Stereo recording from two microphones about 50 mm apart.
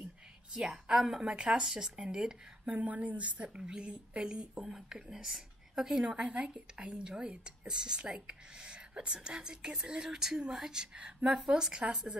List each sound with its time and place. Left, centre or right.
0.5 s speech: centre
1.2 s speech: right
2.8 s speech: right; by 6.0 s centre
6.0 s speech: right
11.3 s speech: centre